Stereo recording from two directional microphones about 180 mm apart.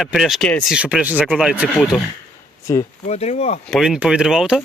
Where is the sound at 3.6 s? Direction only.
Centre (ahead or behind).